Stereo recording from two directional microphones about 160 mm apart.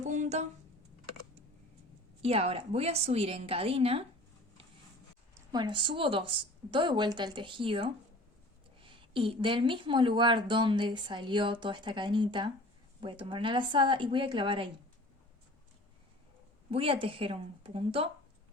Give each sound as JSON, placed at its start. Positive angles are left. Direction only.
{"t": 0.0, "sound": "speech", "side_deg": -50}
{"t": 2.2, "sound": "a woman's voice", "side_deg": -40}
{"t": 5.5, "sound": "a woman's voice", "side_deg": -25}
{"t": 16.7, "sound": "a woman's voice", "side_deg": -35}